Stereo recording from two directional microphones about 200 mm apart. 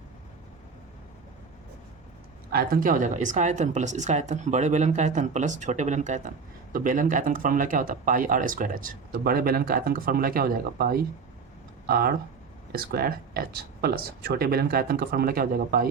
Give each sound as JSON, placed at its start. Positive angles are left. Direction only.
{"t": 2.5, "sound": "speech", "side_deg": -45}